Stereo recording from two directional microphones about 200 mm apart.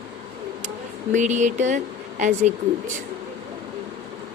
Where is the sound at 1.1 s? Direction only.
35° right (ahead or behind).